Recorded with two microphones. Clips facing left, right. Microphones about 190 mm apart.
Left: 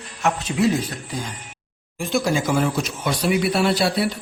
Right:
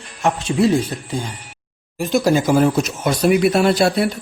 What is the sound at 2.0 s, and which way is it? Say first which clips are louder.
A man's voice: right 5 dB; 40° right (ahead or behind).